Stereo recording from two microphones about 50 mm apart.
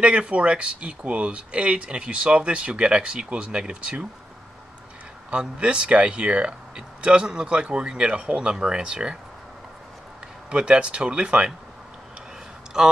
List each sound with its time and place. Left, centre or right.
0.0 s speech: right
5.3 s speech: right
10.5 s speech: centre
12.7 s speech: centre